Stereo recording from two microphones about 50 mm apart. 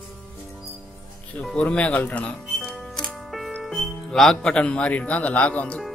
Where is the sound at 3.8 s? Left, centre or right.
Centre; by 5.8 s left.